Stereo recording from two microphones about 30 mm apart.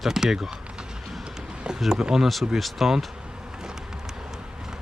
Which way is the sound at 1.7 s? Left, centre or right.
Right.